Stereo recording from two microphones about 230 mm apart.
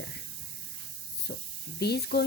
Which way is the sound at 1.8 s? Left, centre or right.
Left.